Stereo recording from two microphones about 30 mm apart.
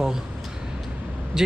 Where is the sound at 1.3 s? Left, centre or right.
Centre.